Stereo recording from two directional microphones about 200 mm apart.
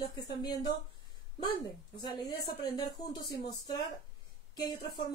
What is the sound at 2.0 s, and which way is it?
Speech, 20° left (ahead or behind).